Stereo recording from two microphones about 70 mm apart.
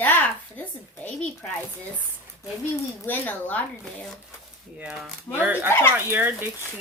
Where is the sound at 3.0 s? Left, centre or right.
Left.